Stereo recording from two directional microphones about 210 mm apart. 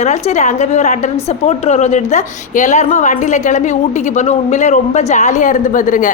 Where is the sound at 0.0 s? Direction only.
35° left (ahead or behind).